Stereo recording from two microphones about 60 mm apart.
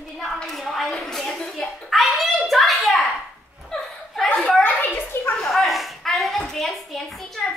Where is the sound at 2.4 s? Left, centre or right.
Centre.